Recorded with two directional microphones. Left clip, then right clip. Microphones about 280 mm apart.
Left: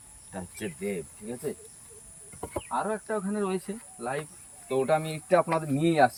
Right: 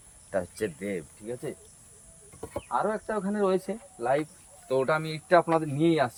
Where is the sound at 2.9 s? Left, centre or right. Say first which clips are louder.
Right 1 dB; centre.